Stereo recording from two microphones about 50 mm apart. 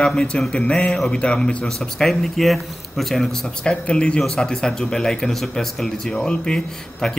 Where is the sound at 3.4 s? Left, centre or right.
Centre.